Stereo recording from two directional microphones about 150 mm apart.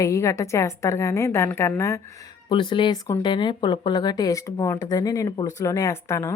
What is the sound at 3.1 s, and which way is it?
Speech, 20° left (ahead or behind).